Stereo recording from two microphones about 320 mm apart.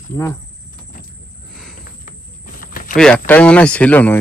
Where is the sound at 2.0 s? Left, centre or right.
Left.